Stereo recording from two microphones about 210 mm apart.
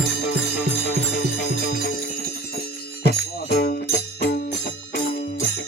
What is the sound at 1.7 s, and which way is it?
Jingle bell, 45° left (ahead or behind).